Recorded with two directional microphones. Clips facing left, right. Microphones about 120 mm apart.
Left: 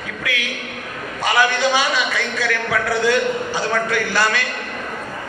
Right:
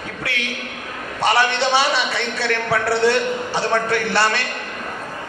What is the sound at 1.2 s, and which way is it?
A man's voice, 30° right (ahead or behind).